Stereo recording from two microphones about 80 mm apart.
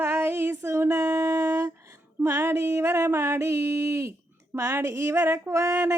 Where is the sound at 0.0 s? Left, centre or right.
Right.